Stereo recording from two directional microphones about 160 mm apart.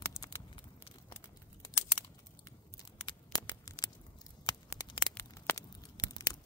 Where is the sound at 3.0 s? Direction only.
30° left (ahead or behind).